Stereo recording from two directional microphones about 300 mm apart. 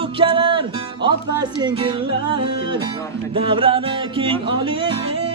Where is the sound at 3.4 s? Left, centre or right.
Centre.